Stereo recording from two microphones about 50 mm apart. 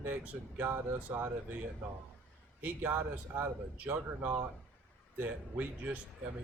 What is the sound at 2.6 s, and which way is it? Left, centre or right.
Speech, right.